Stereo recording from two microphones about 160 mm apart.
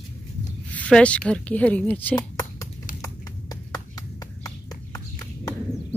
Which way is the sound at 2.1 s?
20° left (ahead or behind).